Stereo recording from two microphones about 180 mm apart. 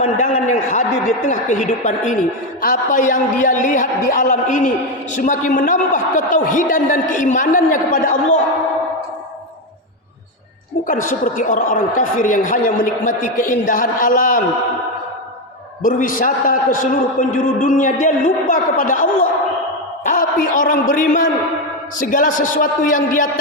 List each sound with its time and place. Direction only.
0.0 s a man's voice: 40° left (ahead or behind)
10.8 s speech: 50° left (ahead or behind)
15.8 s a man's voice: 45° left (ahead or behind)